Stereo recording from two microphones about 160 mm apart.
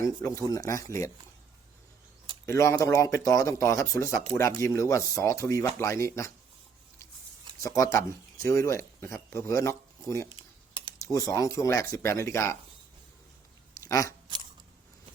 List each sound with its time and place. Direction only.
0.0 s speech: 20° left (ahead or behind)
2.5 s speech: 15° left (ahead or behind)
7.8 s speech: 20° left (ahead or behind)
13.8 s speech: 20° left (ahead or behind)